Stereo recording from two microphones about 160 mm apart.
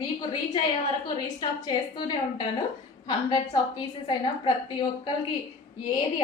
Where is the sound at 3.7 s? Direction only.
30° left (ahead or behind).